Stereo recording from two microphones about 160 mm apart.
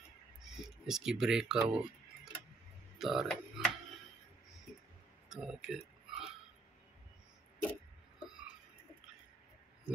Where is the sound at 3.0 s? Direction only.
Centre (ahead or behind).